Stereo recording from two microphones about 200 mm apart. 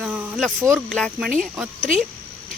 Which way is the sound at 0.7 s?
5° left (ahead or behind).